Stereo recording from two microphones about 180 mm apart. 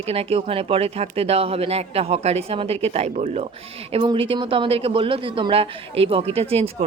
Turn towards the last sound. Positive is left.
turn(degrees=-35)  # may be behind; listen again after turning